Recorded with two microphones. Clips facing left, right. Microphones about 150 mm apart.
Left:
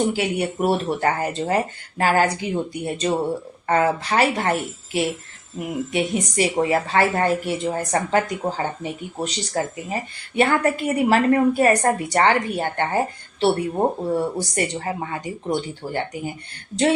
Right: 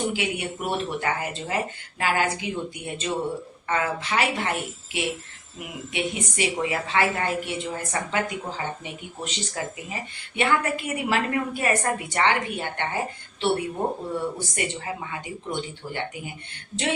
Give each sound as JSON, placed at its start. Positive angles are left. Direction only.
{"t": 0.1, "sound": "a woman's voice", "side_deg": 40}